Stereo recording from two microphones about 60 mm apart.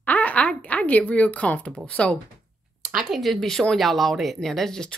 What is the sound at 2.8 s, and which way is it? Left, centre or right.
A woman's voice, centre.